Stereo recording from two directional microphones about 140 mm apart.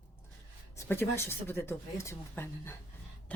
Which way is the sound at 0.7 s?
20° left (ahead or behind).